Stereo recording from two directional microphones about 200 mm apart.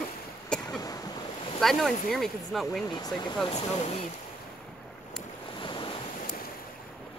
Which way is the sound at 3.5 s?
35° left (ahead or behind).